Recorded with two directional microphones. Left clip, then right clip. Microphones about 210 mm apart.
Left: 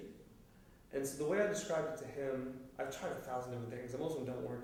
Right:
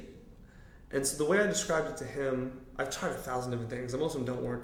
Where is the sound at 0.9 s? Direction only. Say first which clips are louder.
Right 8 dB; 35° right (ahead or behind).